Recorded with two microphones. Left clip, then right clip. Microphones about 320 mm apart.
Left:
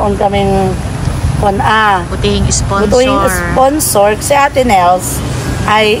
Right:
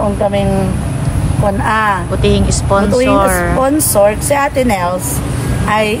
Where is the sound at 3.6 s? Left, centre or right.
Centre.